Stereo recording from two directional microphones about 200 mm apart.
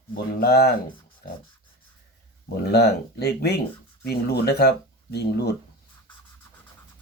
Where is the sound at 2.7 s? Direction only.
55° left (ahead or behind).